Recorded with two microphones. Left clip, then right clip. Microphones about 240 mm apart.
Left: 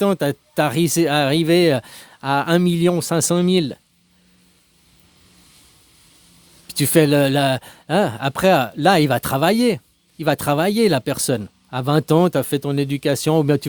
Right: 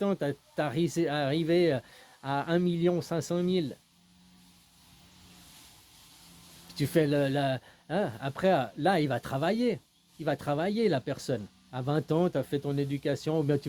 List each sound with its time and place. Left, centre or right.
0.0 s speech: left
6.7 s speech: left